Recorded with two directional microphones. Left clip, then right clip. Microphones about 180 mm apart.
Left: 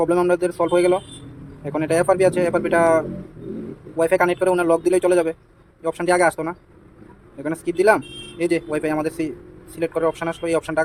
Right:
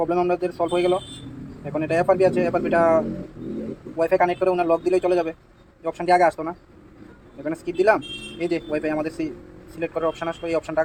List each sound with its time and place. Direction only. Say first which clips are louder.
0.0 s a man's voice: left 3 dB; 45° left (ahead or behind)